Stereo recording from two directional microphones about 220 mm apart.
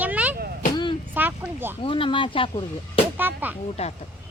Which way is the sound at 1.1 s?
10° right (ahead or behind).